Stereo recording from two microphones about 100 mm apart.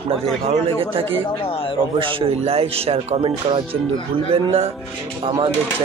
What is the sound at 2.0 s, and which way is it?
Speech, 70° right (ahead or behind).